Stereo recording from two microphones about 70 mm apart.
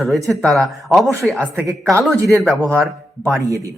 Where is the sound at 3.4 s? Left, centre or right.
Right.